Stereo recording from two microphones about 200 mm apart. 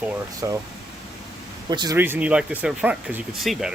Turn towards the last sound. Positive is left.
turn(degrees=0)  # may be behind; listen again after turning